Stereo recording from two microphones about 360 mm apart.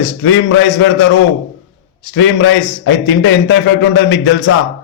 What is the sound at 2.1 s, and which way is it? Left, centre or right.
A man's voice, left.